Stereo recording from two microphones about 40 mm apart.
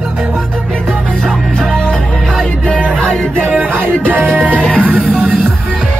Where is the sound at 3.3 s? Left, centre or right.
Right.